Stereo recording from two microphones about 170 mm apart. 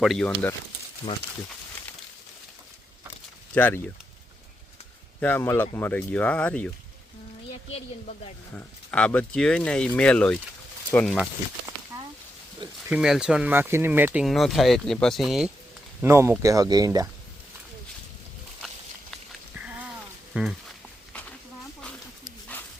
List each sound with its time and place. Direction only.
0.0 s speech: centre (ahead or behind)
3.5 s speech: 10° left (ahead or behind)
5.2 s speech: 10° left (ahead or behind)
8.5 s speech: 5° left (ahead or behind)
11.9 s a sound: 15° right (ahead or behind)
12.9 s speech: 5° right (ahead or behind)
16.0 s speech: 15° right (ahead or behind)
19.5 s a sound: 10° right (ahead or behind)